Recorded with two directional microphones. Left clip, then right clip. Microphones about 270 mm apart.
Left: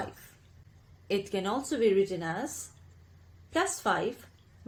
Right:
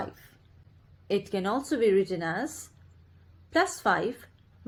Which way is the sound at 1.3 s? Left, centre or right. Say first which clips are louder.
Right 3 dB; right.